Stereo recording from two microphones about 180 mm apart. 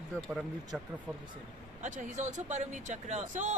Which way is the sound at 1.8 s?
45° right (ahead or behind).